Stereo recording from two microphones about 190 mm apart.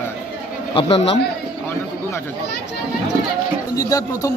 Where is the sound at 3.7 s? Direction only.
20° left (ahead or behind).